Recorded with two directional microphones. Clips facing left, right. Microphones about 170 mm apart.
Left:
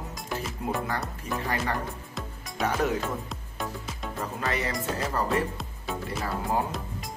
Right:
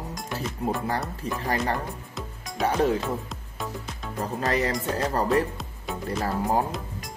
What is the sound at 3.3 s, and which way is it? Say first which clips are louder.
Music: even; centre (ahead or behind).